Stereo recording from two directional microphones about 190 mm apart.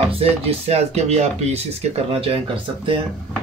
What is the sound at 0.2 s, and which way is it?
Speech, 30° right (ahead or behind).